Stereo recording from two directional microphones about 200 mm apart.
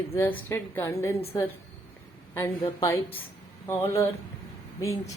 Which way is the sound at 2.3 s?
15° left (ahead or behind).